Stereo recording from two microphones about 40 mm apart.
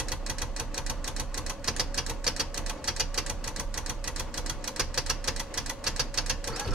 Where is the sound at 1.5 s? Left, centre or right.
Centre.